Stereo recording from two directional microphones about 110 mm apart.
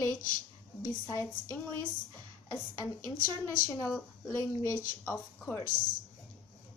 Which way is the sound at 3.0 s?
25° left (ahead or behind).